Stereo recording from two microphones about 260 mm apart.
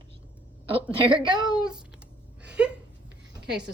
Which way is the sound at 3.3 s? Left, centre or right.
Right.